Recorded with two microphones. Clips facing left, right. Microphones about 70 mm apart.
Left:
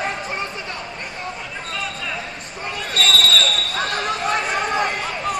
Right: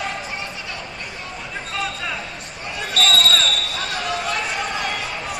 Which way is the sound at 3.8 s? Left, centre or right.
Left.